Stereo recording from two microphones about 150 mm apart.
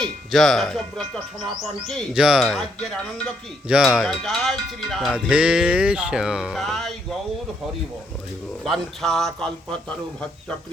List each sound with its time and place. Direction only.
0.0 s speech: 5° left (ahead or behind)
2.1 s music: 5° right (ahead or behind)
3.7 s music: 5° right (ahead or behind)
8.6 s music: centre (ahead or behind)